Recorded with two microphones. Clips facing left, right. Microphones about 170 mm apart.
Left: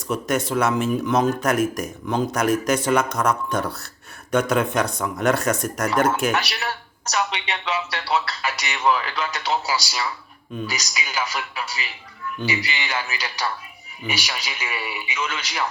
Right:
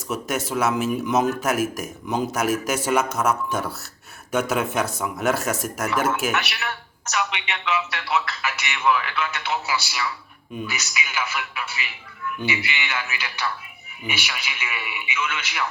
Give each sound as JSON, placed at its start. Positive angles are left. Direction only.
{"t": 0.1, "sound": "a man's voice", "side_deg": -5}
{"t": 6.3, "sound": "a man's voice", "side_deg": 35}